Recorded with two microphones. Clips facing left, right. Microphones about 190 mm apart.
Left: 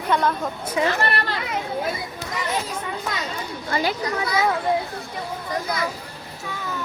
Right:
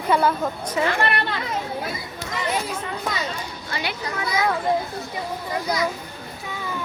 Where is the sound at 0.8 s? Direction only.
15° left (ahead or behind).